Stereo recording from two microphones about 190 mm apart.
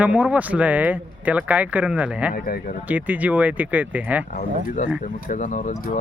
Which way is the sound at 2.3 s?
50° left (ahead or behind).